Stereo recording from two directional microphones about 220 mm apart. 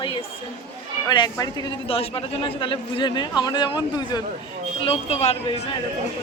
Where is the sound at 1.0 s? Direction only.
20° left (ahead or behind).